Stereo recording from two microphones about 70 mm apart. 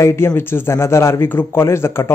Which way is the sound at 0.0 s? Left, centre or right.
Left.